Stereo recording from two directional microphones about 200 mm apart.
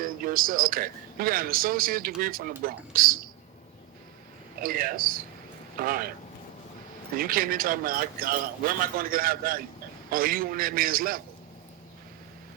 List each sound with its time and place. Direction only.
0.0 s a man's voice: 45° right (ahead or behind)
4.6 s a man's voice: 45° right (ahead or behind)
7.2 s a man's voice: 45° right (ahead or behind)